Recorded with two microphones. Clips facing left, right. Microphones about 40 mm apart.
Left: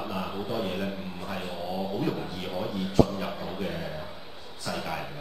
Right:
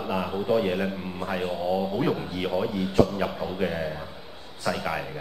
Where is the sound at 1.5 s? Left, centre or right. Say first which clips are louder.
Right 5 dB; centre.